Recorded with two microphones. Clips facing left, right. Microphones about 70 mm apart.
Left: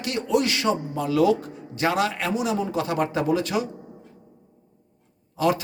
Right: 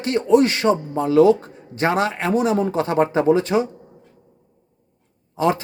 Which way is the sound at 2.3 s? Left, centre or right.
Right.